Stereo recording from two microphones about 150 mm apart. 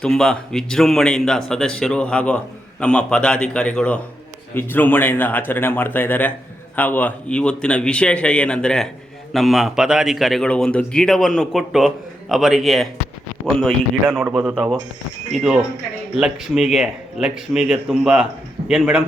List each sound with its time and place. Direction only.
0.0 s a man's voice: 5° left (ahead or behind)